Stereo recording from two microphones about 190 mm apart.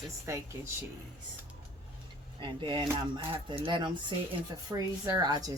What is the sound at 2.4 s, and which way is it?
Speech, 25° right (ahead or behind).